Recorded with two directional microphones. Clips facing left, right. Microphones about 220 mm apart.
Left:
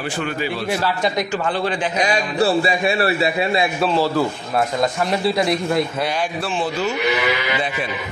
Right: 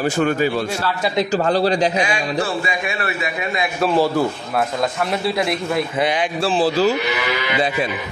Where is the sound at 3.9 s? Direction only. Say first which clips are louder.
Right 4 dB; 15° right (ahead or behind).